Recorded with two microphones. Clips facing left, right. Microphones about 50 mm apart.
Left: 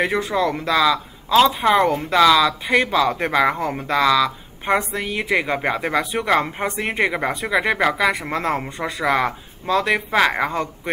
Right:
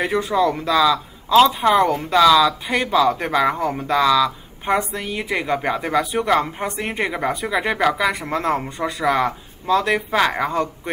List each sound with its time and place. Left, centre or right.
0.0 s speech: centre
2.1 s speech: centre
3.9 s speech: centre